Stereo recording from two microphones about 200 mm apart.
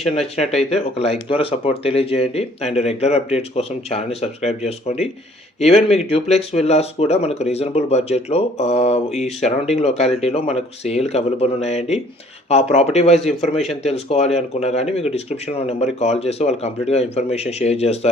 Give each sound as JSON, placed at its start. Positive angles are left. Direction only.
{"t": 0.3, "sound": "speech", "side_deg": 30}